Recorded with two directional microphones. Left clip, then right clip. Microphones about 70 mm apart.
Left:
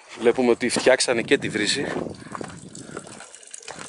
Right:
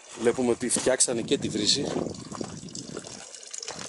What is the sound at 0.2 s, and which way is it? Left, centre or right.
Speech, centre.